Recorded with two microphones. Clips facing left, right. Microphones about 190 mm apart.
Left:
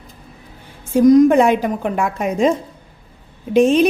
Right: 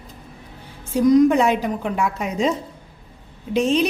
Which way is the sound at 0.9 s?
45° left (ahead or behind).